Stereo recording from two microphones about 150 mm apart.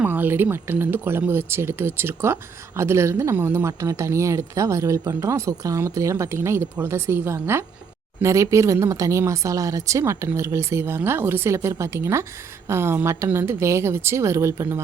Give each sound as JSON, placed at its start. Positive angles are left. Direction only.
{"t": 0.0, "sound": "speech", "side_deg": -10}